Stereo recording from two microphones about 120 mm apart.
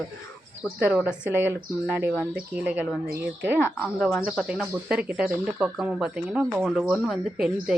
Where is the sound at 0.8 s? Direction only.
5° right (ahead or behind).